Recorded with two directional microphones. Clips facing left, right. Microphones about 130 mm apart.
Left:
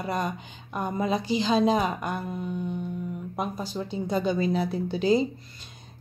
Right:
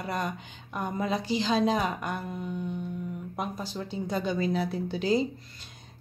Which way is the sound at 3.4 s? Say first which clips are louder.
Left 3 dB; 15° left (ahead or behind).